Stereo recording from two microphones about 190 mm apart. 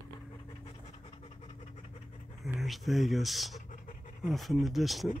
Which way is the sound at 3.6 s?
45° left (ahead or behind).